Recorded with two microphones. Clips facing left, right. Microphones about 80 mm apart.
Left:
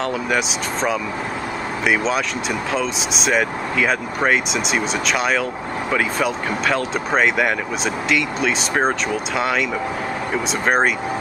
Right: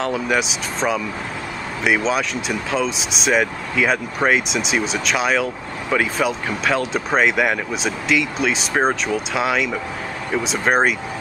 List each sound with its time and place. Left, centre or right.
0.0 s speech: centre